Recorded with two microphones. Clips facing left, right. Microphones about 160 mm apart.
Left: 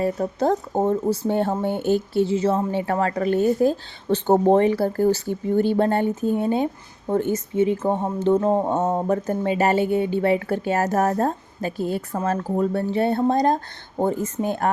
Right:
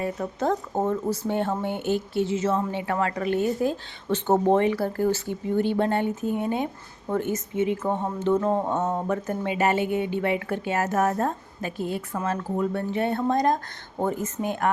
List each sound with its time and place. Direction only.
0.0 s speech: 35° left (ahead or behind)